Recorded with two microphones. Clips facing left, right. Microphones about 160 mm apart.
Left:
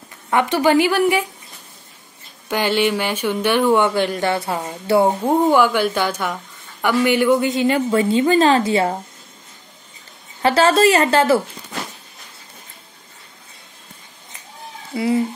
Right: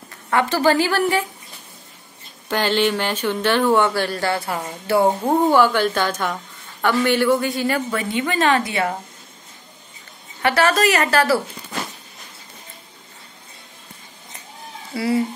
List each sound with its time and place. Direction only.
0.3 s speech: 20° left (ahead or behind)
2.4 s a woman's voice: 10° left (ahead or behind)
5.0 s a woman's voice: 10° left (ahead or behind); by 8.9 s 30° left (ahead or behind)
10.4 s a woman's voice: 25° left (ahead or behind)
14.9 s speech: 20° left (ahead or behind)